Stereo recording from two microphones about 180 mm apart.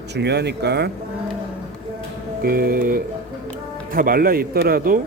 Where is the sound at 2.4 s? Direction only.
55° right (ahead or behind).